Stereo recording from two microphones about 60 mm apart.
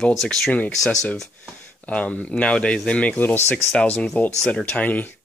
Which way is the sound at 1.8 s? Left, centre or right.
Left.